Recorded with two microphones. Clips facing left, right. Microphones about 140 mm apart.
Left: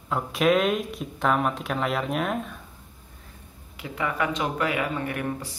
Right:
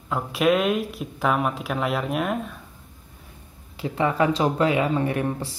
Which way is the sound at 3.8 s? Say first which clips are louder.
Right 6 dB; 30° right (ahead or behind).